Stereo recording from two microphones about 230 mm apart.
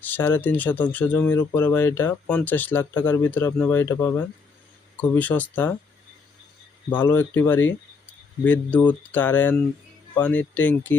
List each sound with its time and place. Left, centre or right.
0.0 s speech: centre
6.9 s speech: centre